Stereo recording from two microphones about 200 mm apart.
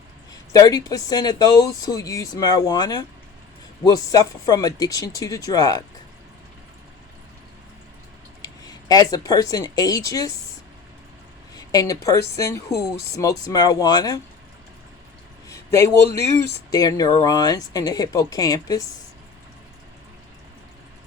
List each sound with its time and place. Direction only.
0.5 s speech: 20° left (ahead or behind)
8.4 s speech: 20° left (ahead or behind)
11.5 s speech: 20° left (ahead or behind)
15.4 s a sound: 15° left (ahead or behind)
16.7 s speech: 20° left (ahead or behind)